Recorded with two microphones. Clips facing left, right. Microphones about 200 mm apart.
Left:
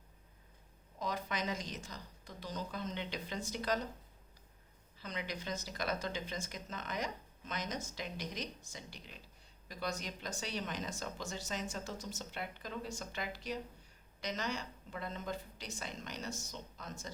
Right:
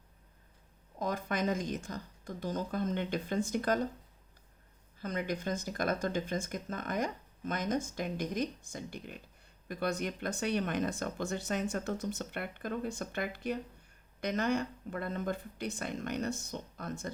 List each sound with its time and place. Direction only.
0.9 s speech: 50° right (ahead or behind)
4.9 s speech: 50° right (ahead or behind)